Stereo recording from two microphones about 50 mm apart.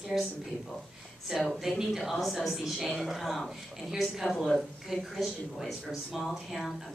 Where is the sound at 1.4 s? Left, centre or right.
Centre.